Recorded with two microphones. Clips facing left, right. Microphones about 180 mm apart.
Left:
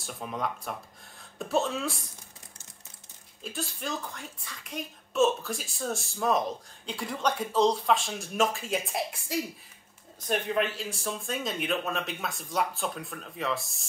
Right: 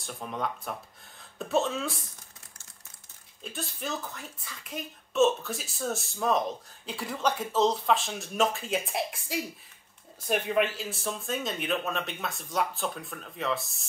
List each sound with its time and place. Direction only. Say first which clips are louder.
0.0 s speech: even; centre (ahead or behind)
3.4 s speech: left 1 dB; centre (ahead or behind)